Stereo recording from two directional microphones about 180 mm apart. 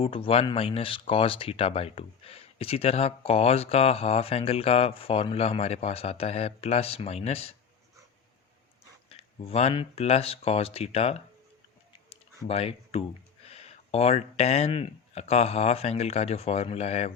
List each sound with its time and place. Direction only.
0.0 s speech: 30° left (ahead or behind)
9.0 s speech: 30° left (ahead or behind)
12.0 s a sound: 35° left (ahead or behind)
13.5 s speech: 35° left (ahead or behind)